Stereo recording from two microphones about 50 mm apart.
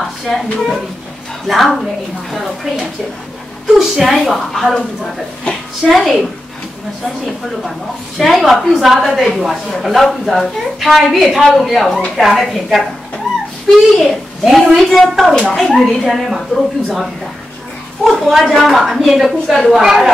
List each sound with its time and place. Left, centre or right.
0.0 s a woman's voice: centre
3.7 s a woman's voice: centre
4.7 s speech: centre
5.5 s a woman's voice: centre
8.2 s a woman's voice: centre
18.3 s a woman's voice: centre